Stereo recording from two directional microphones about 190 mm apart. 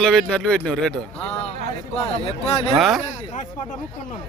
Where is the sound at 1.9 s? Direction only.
30° left (ahead or behind).